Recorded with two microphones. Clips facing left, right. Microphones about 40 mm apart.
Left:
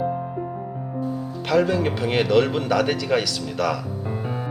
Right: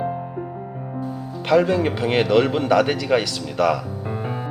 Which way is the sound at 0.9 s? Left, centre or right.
Centre.